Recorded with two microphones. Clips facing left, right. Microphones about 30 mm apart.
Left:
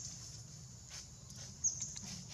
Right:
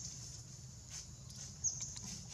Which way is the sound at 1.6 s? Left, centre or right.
Centre.